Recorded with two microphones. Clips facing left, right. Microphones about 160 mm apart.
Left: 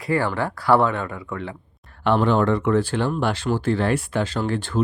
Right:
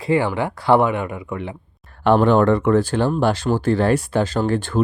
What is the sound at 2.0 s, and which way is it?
Speech, 50° right (ahead or behind).